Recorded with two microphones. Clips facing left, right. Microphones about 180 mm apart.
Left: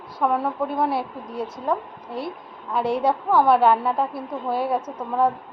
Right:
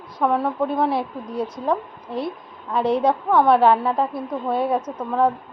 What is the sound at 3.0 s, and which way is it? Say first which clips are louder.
A woman's voice: left 1 dB; 5° left (ahead or behind).